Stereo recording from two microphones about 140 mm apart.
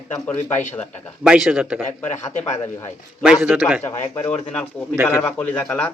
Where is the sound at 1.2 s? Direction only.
5° right (ahead or behind).